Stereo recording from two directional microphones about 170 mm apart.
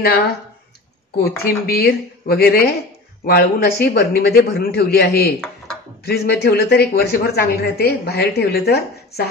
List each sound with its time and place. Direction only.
1.2 s a man's voice: 65° left (ahead or behind)